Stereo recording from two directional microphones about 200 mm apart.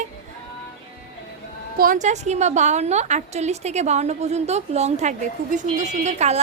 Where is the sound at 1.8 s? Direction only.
40° right (ahead or behind).